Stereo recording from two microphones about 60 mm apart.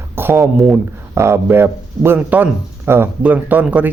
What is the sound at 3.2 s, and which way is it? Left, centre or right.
Speech, right.